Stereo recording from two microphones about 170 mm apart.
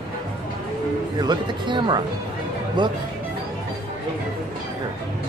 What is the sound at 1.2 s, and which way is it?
Speech, 25° right (ahead or behind).